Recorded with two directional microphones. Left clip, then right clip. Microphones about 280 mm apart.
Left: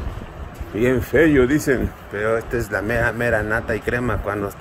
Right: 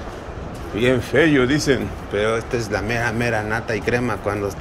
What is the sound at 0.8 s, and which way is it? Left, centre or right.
Speech, centre.